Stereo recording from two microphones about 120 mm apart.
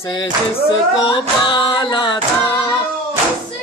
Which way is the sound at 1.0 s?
40° left (ahead or behind).